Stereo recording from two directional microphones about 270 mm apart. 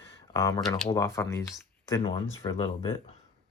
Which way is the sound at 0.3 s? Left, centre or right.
Centre.